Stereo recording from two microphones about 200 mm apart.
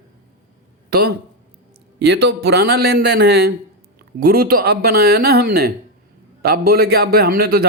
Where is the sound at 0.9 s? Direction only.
50° right (ahead or behind).